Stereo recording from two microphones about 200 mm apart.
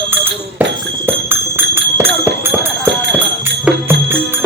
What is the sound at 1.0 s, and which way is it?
Music, 10° right (ahead or behind).